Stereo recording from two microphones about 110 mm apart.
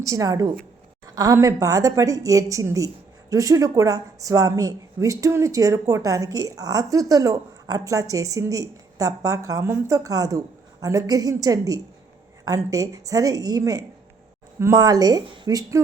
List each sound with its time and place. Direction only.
0.0 s a woman's voice: 30° right (ahead or behind)